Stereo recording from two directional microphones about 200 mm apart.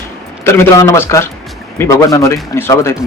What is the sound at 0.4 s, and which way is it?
A man's voice, 15° left (ahead or behind).